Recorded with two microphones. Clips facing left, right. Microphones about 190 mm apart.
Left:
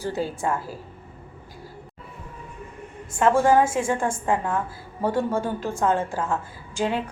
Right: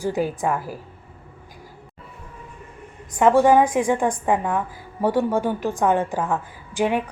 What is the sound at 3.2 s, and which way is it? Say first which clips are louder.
A woman's voice: right 3 dB; 15° right (ahead or behind).